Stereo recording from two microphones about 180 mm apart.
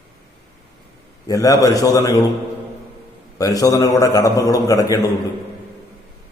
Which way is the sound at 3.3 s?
20° left (ahead or behind).